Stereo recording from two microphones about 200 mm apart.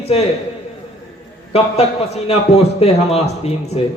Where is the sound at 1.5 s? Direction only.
30° left (ahead or behind).